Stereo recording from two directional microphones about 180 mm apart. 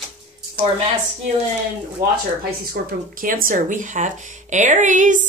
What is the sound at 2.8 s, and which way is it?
Speech, 60° right (ahead or behind).